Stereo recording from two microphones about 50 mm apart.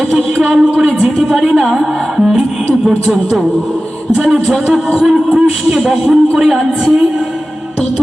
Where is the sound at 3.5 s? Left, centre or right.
Centre.